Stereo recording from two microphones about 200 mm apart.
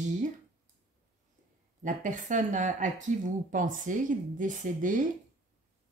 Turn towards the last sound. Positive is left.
turn(degrees=-40)  # may be behind; listen again after turning